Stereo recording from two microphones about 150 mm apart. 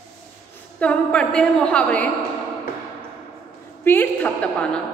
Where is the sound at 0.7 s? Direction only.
5° left (ahead or behind).